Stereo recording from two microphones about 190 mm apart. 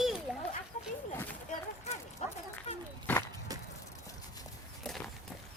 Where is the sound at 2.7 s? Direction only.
35° left (ahead or behind).